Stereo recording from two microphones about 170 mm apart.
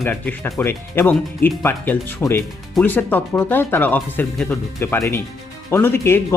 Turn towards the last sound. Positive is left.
turn(degrees=15)  # may be behind; listen again after turning